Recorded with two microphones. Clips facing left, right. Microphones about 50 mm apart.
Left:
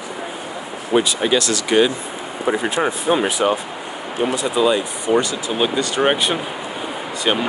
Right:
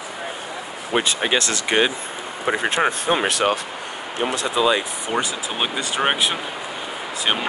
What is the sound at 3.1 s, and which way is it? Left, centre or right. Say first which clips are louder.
Speech: left 2 dB; right.